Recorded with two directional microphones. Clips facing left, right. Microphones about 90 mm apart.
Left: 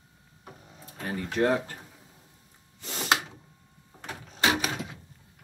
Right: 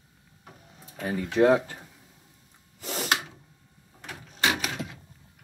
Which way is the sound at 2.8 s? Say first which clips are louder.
Right 4 dB; 15° right (ahead or behind).